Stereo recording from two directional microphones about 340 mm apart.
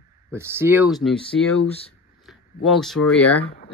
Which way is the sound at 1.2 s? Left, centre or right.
Centre.